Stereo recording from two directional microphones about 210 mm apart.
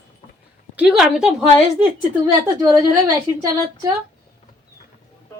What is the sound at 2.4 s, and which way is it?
Speech, 15° right (ahead or behind).